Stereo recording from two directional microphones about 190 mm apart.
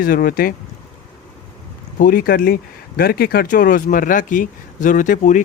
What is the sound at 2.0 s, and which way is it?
Speech, 50° left (ahead or behind).